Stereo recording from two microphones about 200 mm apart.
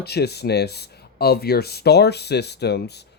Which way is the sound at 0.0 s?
55° left (ahead or behind).